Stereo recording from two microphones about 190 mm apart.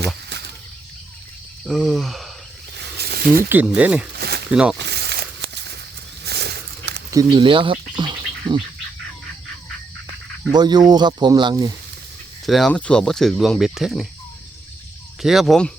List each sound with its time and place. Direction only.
0.0 s a sound: 65° right (ahead or behind)
1.6 s speech: centre (ahead or behind)
2.7 s snake: 60° right (ahead or behind)
3.5 s speech: 10° right (ahead or behind)
4.2 s a sound: 60° right (ahead or behind)
4.5 s speech: 5° right (ahead or behind)
4.8 s a sound: 60° right (ahead or behind)
7.1 s speech: 20° right (ahead or behind)
10.5 s speech: 20° right (ahead or behind)
12.5 s speech: centre (ahead or behind)
15.2 s speech: centre (ahead or behind)